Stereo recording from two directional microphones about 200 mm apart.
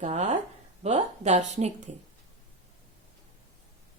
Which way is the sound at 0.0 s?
35° right (ahead or behind).